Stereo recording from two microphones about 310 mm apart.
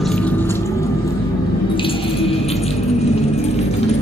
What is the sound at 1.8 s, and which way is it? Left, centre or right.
Drip, centre.